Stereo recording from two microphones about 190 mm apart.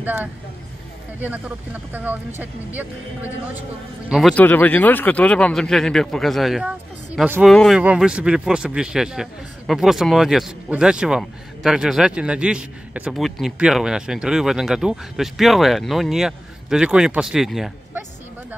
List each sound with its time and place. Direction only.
0.0 s speech: 10° right (ahead or behind)
4.1 s a man's voice: 5° left (ahead or behind)